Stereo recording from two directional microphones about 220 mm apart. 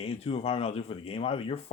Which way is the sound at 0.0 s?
25° left (ahead or behind).